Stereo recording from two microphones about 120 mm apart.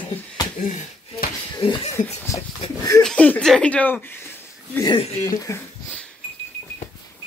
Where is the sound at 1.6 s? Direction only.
55° left (ahead or behind).